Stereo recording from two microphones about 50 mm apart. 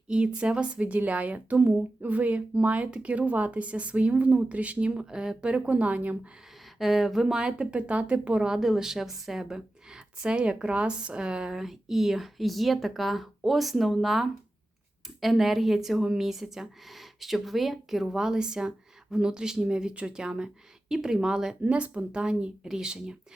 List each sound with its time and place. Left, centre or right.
0.1 s speech: centre
5.7 s speech: right
6.7 s speech: centre
7.3 s speech: centre
21.6 s speech: right